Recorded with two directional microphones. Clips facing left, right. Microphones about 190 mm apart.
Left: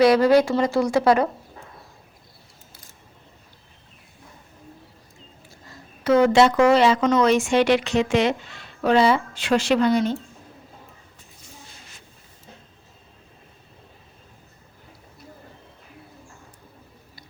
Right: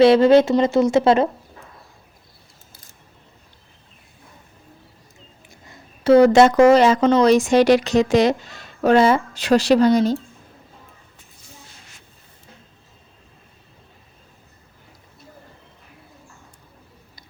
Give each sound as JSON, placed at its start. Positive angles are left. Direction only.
{"t": 0.0, "sound": "speech", "side_deg": -25}
{"t": 6.0, "sound": "speech", "side_deg": -35}